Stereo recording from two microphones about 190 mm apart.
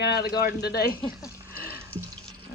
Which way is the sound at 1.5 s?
55° left (ahead or behind).